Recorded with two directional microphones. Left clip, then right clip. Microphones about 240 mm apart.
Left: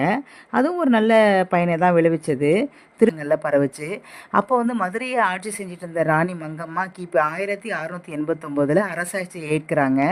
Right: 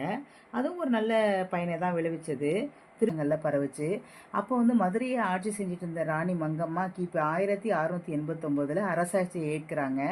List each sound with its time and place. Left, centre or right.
0.0 s speech: left